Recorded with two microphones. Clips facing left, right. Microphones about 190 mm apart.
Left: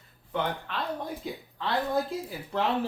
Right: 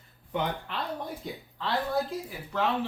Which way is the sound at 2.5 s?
30° left (ahead or behind).